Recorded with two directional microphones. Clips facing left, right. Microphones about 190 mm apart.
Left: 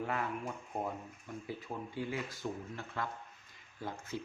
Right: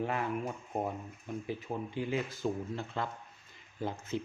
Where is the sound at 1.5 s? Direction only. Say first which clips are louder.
Right 4 dB; 20° right (ahead or behind).